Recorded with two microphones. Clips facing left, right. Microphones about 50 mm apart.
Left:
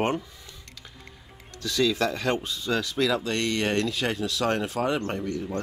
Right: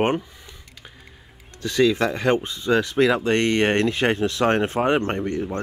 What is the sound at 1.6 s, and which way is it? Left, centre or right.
Speech, right.